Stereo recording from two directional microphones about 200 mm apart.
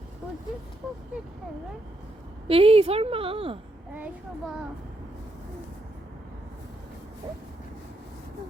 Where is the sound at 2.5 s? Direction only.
30° right (ahead or behind).